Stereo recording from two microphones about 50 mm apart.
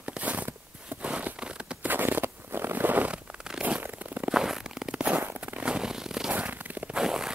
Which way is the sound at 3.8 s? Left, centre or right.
Right.